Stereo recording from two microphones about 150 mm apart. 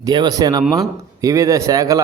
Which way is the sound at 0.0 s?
30° right (ahead or behind).